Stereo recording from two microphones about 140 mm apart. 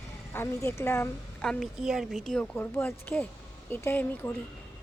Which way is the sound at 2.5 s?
15° left (ahead or behind).